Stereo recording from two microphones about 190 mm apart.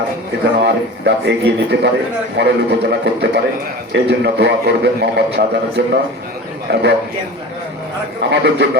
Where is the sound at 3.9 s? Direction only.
60° right (ahead or behind).